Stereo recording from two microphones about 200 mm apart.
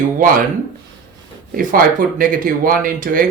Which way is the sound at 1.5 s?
45° right (ahead or behind).